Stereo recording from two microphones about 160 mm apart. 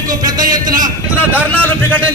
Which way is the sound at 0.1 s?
25° right (ahead or behind).